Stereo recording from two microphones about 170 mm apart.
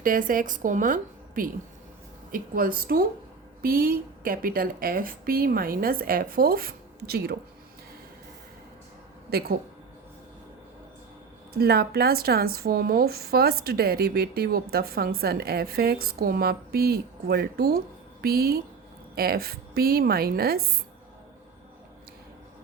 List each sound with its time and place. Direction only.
0.0 s a woman's voice: 55° right (ahead or behind)
9.3 s a woman's voice: 65° right (ahead or behind)
11.5 s a woman's voice: 65° right (ahead or behind)